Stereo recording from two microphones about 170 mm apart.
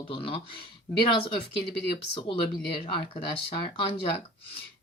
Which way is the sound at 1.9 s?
30° left (ahead or behind).